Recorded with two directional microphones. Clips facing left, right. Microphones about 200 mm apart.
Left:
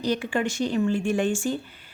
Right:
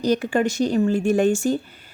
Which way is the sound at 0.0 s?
40° right (ahead or behind).